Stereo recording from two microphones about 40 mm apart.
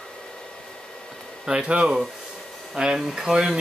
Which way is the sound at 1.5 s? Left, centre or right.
Right.